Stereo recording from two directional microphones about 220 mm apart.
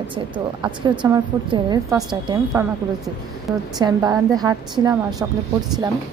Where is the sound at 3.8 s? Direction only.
15° right (ahead or behind).